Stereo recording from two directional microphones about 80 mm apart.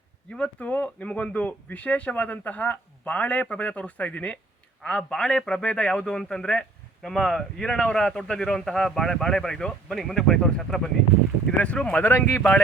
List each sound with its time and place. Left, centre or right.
0.3 s a man's voice: centre
11.5 s a man's voice: centre